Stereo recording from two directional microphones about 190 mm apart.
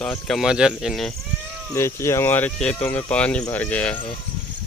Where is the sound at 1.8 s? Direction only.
15° left (ahead or behind).